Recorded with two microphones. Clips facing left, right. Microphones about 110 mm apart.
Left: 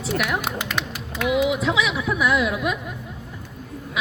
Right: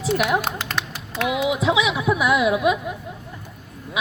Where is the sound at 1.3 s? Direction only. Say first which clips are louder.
Even; 10° right (ahead or behind).